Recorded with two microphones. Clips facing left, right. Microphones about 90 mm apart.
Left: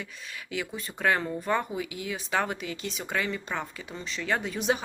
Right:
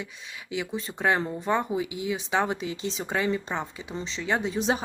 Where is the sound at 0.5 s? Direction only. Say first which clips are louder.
Right 3 dB; 25° right (ahead or behind).